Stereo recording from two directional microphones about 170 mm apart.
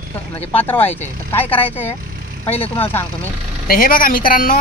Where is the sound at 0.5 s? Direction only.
10° left (ahead or behind).